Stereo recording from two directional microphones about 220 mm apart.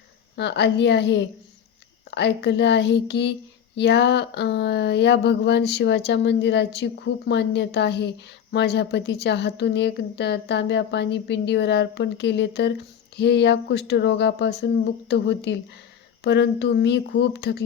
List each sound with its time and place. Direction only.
0.3 s a woman's voice: 50° left (ahead or behind)